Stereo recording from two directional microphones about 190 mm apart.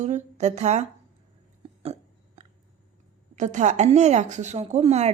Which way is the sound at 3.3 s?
40° right (ahead or behind).